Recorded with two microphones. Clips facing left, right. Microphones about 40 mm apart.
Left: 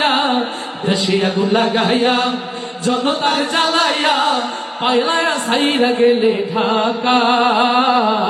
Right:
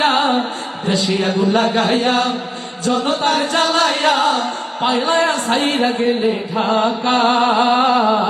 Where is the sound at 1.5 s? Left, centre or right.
Left.